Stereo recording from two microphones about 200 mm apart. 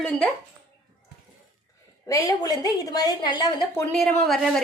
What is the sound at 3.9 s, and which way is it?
Speech, centre (ahead or behind).